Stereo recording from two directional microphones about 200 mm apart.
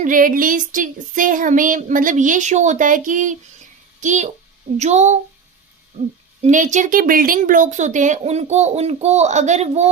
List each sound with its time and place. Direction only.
0.0 s speech: 45° right (ahead or behind)
6.4 s speech: 40° right (ahead or behind)